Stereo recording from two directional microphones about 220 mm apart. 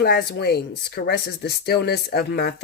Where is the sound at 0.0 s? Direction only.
45° left (ahead or behind).